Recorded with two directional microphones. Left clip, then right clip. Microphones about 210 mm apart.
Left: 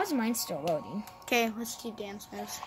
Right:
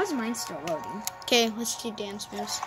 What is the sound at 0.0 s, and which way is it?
Speech, 40° left (ahead or behind).